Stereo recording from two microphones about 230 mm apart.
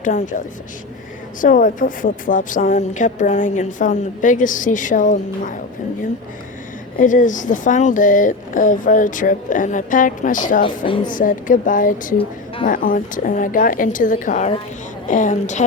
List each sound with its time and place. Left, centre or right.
0.0 s a woman's voice: left
7.0 s a woman's voice: left
10.6 s speech: left
11.0 s a woman's voice: left